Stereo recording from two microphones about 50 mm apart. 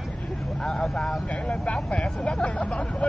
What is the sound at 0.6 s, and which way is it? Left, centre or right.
Speech, centre.